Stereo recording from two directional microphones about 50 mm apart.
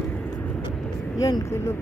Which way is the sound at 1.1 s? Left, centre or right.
Left.